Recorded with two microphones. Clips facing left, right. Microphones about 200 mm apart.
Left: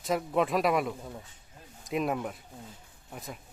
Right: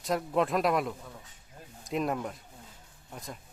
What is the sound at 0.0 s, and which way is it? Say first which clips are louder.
A man's voice: even; centre (ahead or behind).